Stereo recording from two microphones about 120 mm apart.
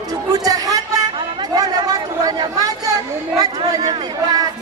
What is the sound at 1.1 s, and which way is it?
Chatter, 35° right (ahead or behind).